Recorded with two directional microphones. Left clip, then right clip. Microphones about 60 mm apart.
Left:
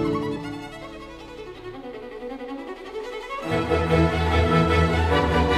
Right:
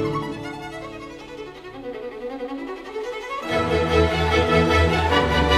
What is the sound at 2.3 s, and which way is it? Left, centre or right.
Violin, left.